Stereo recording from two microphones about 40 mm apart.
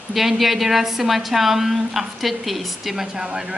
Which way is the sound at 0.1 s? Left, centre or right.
Centre.